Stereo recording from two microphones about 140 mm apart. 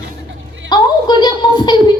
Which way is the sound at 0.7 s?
30° left (ahead or behind).